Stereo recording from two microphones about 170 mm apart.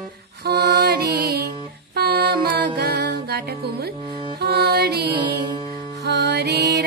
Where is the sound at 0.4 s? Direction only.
70° right (ahead or behind).